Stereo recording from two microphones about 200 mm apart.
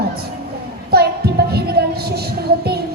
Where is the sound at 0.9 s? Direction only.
50° right (ahead or behind).